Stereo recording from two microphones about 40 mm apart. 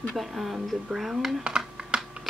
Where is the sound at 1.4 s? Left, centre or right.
Centre.